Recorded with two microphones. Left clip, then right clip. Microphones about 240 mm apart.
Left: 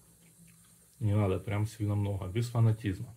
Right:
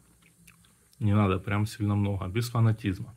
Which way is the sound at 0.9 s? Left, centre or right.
Right.